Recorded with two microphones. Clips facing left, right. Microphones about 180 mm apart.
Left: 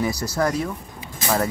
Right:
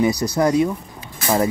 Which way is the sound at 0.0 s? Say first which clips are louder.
Right 5 dB; 20° right (ahead or behind).